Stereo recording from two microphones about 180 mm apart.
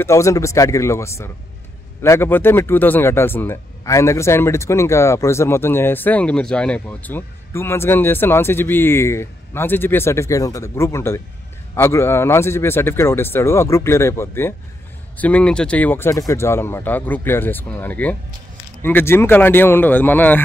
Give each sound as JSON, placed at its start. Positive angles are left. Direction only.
{"t": 0.0, "sound": "speech", "side_deg": 15}